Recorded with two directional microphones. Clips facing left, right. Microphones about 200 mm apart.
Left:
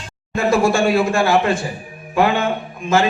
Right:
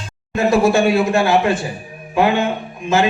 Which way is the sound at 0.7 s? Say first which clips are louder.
Right 2 dB; 20° right (ahead or behind).